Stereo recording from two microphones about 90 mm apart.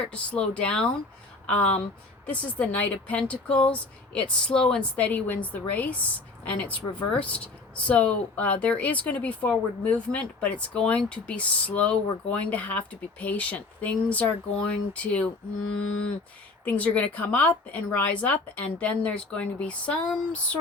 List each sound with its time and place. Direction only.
0.1 s speech: 15° left (ahead or behind)
16.6 s speech: 15° left (ahead or behind)